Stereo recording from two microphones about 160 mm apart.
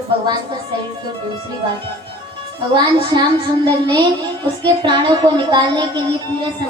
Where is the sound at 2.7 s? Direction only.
25° right (ahead or behind).